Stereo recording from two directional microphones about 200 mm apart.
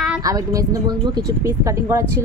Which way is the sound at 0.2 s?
15° right (ahead or behind).